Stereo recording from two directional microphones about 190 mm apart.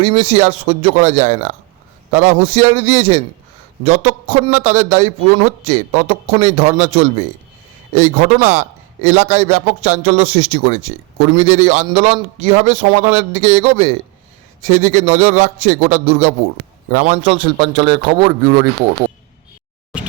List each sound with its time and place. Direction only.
0.0 s a man's voice: 35° right (ahead or behind)